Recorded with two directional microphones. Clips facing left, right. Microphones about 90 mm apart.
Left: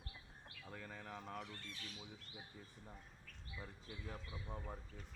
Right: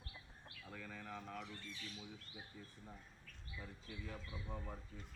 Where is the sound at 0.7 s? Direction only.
30° left (ahead or behind).